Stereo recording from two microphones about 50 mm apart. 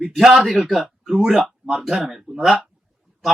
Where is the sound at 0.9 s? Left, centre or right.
Centre.